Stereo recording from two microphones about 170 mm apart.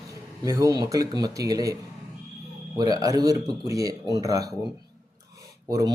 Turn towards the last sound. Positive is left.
turn(degrees=-20)  # may be behind; listen again after turning